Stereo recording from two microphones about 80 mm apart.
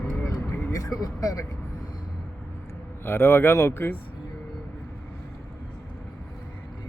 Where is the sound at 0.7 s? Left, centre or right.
Left.